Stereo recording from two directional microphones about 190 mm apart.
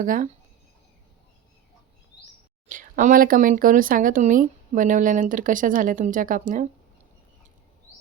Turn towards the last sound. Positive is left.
turn(degrees=-45)  # may be behind; listen again after turning